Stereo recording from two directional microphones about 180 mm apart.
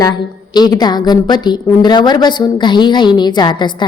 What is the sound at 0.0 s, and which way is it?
A woman's voice, 20° left (ahead or behind).